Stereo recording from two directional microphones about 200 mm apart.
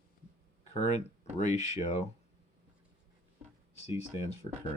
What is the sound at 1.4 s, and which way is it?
Speech, 35° left (ahead or behind).